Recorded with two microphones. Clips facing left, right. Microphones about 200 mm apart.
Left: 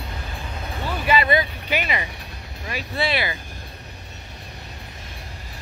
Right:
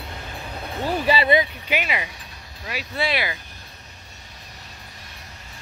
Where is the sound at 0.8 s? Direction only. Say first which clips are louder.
Right 1 dB; 35° right (ahead or behind).